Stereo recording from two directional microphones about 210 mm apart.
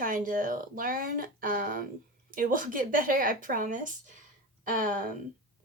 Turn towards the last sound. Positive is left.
turn(degrees=-40)  # may be behind; listen again after turning